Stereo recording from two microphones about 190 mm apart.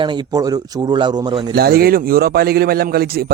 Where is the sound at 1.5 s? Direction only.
55° right (ahead or behind).